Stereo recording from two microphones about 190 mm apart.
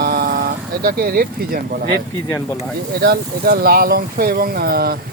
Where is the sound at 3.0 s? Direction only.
55° right (ahead or behind).